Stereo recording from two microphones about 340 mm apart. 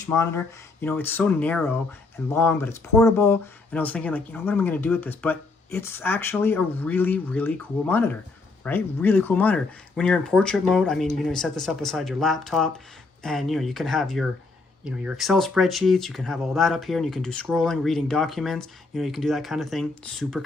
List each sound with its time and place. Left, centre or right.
0.0 s speech: centre